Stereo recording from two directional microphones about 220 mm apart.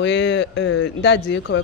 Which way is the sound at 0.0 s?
55° left (ahead or behind).